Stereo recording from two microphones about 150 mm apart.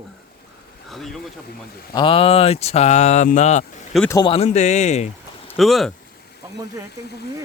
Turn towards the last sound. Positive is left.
turn(degrees=0)  # may be behind; listen again after turning